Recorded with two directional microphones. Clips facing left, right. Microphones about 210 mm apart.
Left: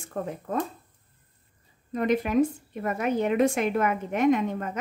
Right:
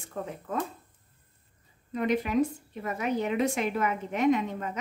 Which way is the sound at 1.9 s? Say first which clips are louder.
Left 3 dB; 45° left (ahead or behind).